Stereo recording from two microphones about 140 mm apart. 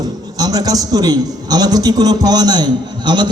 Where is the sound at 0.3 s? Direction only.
25° right (ahead or behind).